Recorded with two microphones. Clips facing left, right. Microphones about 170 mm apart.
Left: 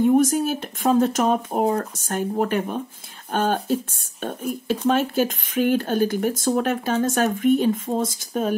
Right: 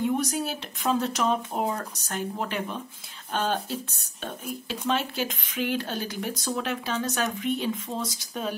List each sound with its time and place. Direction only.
0.0 s speech: 50° left (ahead or behind)